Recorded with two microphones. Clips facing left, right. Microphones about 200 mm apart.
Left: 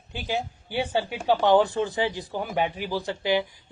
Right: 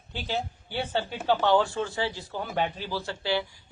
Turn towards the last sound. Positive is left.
turn(degrees=15)  # may be behind; listen again after turning